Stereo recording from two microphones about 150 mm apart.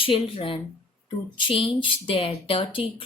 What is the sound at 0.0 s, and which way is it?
Speech, 35° left (ahead or behind).